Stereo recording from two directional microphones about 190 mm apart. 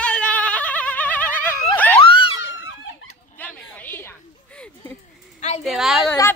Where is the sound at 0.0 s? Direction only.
5° left (ahead or behind).